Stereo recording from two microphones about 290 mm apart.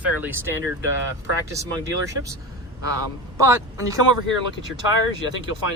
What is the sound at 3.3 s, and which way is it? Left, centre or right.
Speech, centre.